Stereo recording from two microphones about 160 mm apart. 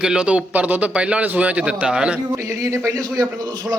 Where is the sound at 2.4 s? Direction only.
20° right (ahead or behind).